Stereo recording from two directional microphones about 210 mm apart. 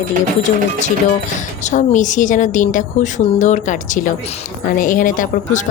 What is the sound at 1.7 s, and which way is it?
Speech, 35° left (ahead or behind).